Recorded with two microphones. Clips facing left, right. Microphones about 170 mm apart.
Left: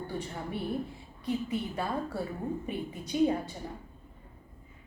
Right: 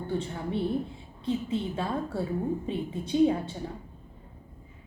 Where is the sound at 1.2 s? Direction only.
25° right (ahead or behind).